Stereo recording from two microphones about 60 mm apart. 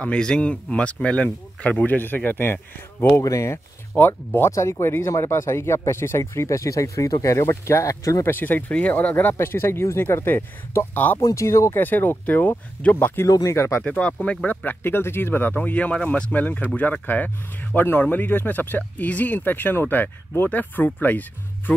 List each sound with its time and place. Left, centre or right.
0.0 s speech: centre; by 3.3 s left
3.3 s speech: left
4.0 s speech: left
4.5 s speech: left
8.2 s speech: left
11.1 s speech: left
11.4 s speech: left
11.7 s speech: left
13.3 s speech: left
13.8 s speech: left
15.5 s speech: left